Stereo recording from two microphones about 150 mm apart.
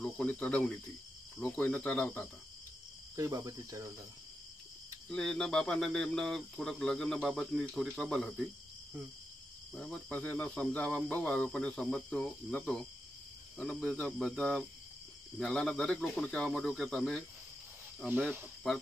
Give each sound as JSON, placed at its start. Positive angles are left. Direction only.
{"t": 0.0, "sound": "speech", "side_deg": 10}
{"t": 3.2, "sound": "speech", "side_deg": -20}
{"t": 5.1, "sound": "speech", "side_deg": 5}
{"t": 9.8, "sound": "speech", "side_deg": 5}
{"t": 18.6, "sound": "speech", "side_deg": 0}